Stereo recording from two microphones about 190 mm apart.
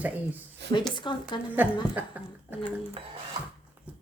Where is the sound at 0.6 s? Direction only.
65° right (ahead or behind).